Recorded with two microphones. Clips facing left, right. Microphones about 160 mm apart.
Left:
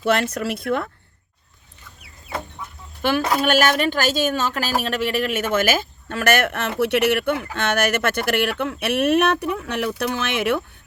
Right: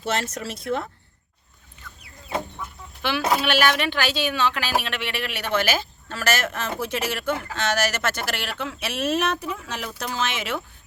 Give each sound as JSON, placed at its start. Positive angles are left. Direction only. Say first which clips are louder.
{"t": 0.0, "sound": "speech", "louder": "left 7 dB", "side_deg": 60}
{"t": 3.0, "sound": "speech", "louder": "left 3 dB", "side_deg": 45}